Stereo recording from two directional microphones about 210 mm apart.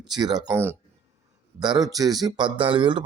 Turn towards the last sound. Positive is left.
turn(degrees=-25)  # may be behind; listen again after turning